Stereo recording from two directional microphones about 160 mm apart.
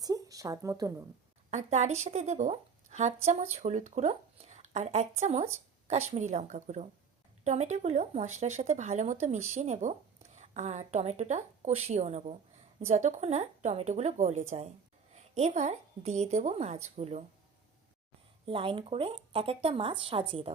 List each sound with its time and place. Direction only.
0.0 s a sound: 20° right (ahead or behind)
1.5 s a woman's voice: 45° right (ahead or behind)
18.4 s speech: 35° right (ahead or behind)